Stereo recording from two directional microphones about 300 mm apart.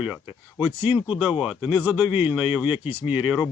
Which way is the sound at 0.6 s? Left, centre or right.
Centre.